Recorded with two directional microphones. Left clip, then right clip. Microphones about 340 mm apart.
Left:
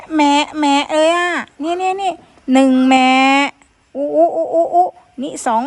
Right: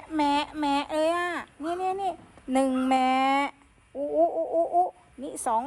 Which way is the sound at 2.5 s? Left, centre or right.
Left.